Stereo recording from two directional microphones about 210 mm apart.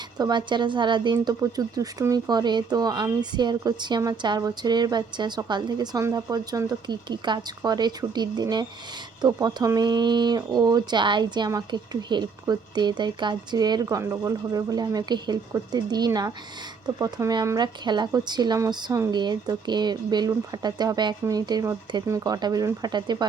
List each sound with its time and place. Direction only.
0.2 s speech: 20° right (ahead or behind)